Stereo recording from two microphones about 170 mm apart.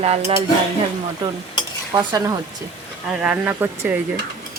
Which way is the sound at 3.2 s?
10° right (ahead or behind).